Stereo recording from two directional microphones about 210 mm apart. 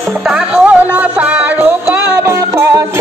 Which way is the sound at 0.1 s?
5° right (ahead or behind).